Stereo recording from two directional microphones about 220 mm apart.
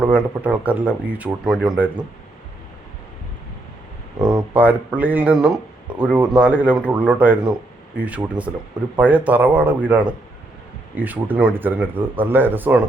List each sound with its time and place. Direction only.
0.0 s speech: 5° right (ahead or behind)
4.2 s a sound: 20° right (ahead or behind)
4.5 s speech: 5° right (ahead or behind)